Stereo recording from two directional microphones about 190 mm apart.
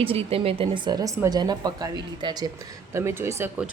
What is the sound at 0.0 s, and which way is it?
A woman's voice, 30° right (ahead or behind).